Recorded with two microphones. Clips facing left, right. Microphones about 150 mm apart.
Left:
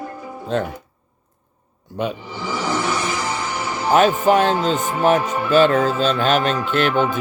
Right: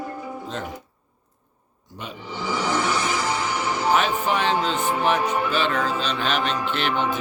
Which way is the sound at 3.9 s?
45° left (ahead or behind).